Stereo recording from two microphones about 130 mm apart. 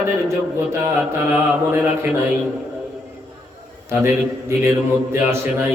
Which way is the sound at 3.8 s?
20° right (ahead or behind).